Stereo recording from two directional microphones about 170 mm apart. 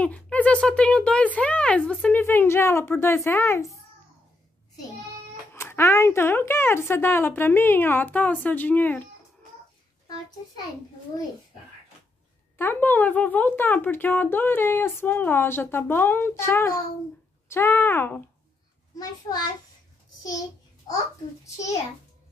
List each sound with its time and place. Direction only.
0.0 s speech: 10° left (ahead or behind)
5.5 s speech: 15° left (ahead or behind)
10.0 s a child's voice: 20° left (ahead or behind)
12.5 s speech: 10° left (ahead or behind)